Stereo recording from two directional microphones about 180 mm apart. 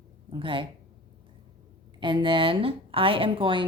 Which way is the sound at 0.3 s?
30° right (ahead or behind).